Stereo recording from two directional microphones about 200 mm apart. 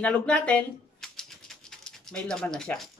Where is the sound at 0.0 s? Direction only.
5° left (ahead or behind).